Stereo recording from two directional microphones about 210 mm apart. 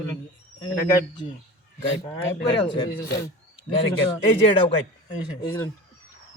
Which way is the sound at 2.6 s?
20° left (ahead or behind).